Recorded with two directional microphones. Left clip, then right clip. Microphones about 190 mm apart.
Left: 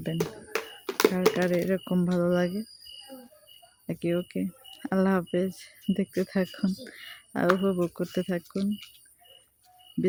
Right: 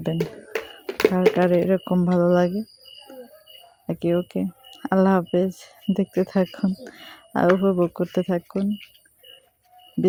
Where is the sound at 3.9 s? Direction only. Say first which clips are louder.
Right 6 dB; 15° right (ahead or behind).